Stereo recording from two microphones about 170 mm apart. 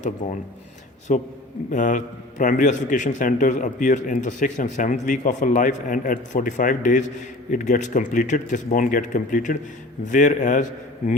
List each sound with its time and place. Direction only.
0.2 s speech: 50° left (ahead or behind)